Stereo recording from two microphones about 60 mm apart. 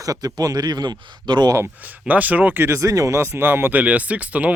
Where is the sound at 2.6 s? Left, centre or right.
Right.